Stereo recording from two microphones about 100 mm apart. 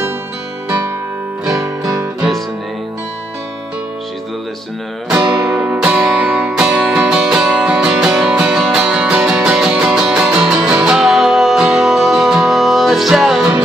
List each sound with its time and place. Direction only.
5.4 s music: 10° right (ahead or behind)